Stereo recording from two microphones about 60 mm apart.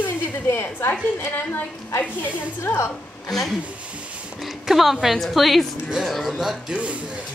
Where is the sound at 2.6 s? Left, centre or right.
Left.